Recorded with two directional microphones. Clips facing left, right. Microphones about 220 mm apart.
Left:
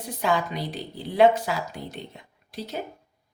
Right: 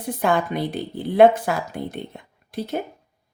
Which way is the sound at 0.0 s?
55° right (ahead or behind).